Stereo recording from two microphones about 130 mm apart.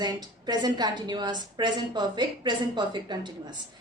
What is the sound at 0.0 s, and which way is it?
A woman's voice, 30° right (ahead or behind).